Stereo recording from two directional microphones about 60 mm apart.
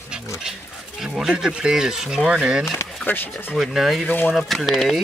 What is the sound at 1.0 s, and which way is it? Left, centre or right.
Speech, centre.